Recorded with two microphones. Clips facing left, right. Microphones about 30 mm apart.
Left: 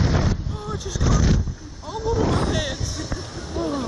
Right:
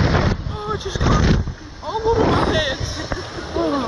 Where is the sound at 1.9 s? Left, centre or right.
Right.